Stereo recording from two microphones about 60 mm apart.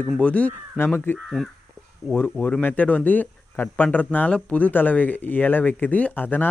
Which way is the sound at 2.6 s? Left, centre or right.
Left.